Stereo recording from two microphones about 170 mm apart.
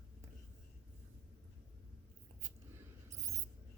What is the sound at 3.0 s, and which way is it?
Mouse, 15° right (ahead or behind).